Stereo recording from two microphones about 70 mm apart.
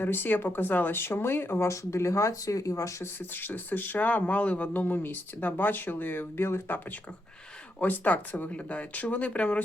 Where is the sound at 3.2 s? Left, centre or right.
Left.